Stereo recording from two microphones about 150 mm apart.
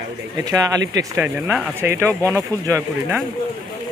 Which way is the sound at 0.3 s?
20° right (ahead or behind).